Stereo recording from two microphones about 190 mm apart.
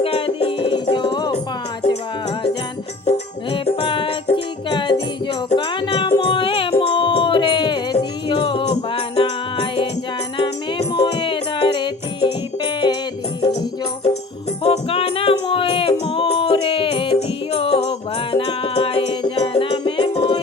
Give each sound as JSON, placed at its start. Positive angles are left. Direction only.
{"t": 0.0, "sound": "music", "side_deg": 30}
{"t": 3.1, "sound": "music", "side_deg": 30}
{"t": 11.0, "sound": "music", "side_deg": 25}
{"t": 14.6, "sound": "music", "side_deg": 30}